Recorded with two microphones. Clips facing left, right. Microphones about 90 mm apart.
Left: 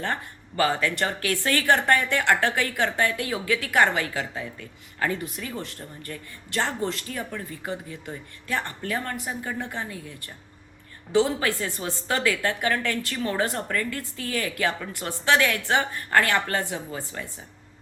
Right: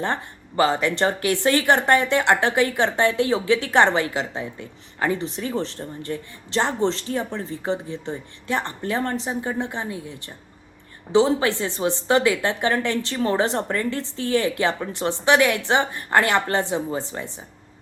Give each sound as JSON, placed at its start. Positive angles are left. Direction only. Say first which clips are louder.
{"t": 0.0, "sound": "speech", "louder": "right 4 dB", "side_deg": -20}